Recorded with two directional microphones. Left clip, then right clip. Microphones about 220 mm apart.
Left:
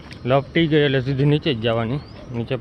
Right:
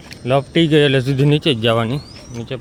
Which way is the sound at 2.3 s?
10° left (ahead or behind).